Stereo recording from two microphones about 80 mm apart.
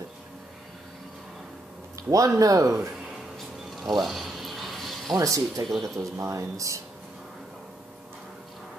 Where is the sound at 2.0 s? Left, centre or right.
Right.